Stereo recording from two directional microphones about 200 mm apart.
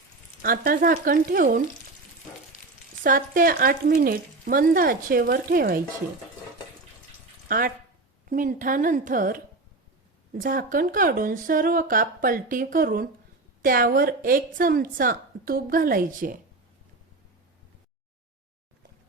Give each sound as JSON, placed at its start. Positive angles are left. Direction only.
{"t": 0.4, "sound": "a woman's voice", "side_deg": -45}
{"t": 3.0, "sound": "a woman's voice", "side_deg": -45}
{"t": 7.4, "sound": "a sound", "side_deg": -45}
{"t": 8.3, "sound": "a woman's voice", "side_deg": -40}